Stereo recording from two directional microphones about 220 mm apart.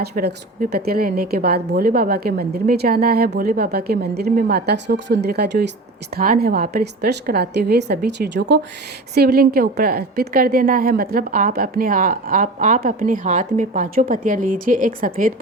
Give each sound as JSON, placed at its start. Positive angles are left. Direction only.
{"t": 0.0, "sound": "a woman's voice", "side_deg": -45}